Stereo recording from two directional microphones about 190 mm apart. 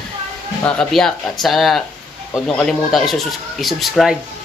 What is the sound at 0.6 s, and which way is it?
Speech, 5° left (ahead or behind).